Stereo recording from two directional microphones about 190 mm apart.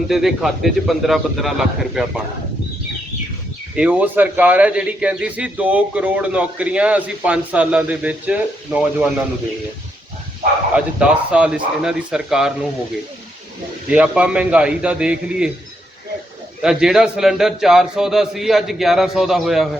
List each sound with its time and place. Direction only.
0.1 s a man's voice: centre (ahead or behind)
3.8 s a man's voice: 5° right (ahead or behind)
10.8 s a man's voice: 5° right (ahead or behind)
13.9 s a man's voice: 5° right (ahead or behind)
16.6 s a man's voice: 5° right (ahead or behind)